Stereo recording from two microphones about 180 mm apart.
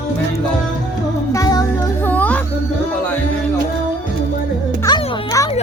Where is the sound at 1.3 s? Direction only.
20° left (ahead or behind).